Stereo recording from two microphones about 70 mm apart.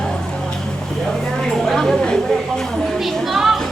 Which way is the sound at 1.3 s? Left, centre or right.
Centre.